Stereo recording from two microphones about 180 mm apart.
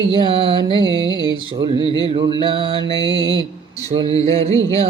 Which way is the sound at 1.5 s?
25° right (ahead or behind).